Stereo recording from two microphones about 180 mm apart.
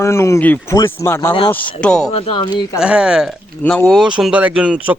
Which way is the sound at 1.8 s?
5° left (ahead or behind).